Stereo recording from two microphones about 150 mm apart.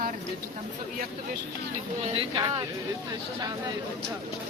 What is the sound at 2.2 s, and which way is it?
Speech, 35° right (ahead or behind).